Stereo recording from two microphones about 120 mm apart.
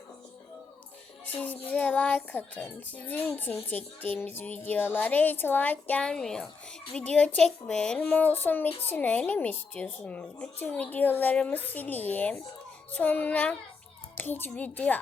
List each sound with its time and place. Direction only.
1.3 s a woman's voice: 15° left (ahead or behind)